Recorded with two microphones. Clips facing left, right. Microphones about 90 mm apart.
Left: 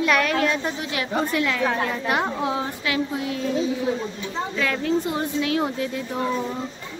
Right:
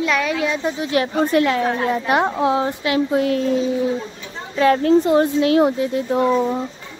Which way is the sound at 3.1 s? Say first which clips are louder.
Right 9 dB; 55° right (ahead or behind).